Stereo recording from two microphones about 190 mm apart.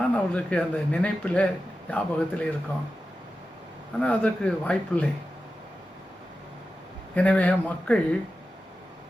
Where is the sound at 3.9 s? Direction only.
5° left (ahead or behind).